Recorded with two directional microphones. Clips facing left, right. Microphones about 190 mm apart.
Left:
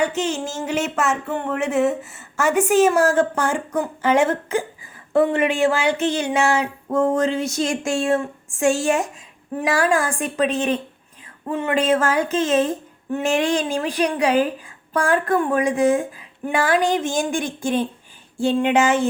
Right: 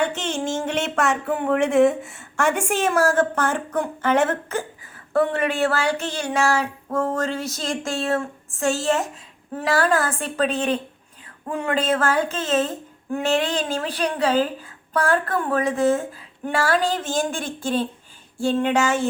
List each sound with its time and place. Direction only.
0.0 s speech: 10° left (ahead or behind)
5.3 s a sound: 15° left (ahead or behind)
7.3 s speech: centre (ahead or behind)
8.9 s speech: 15° left (ahead or behind)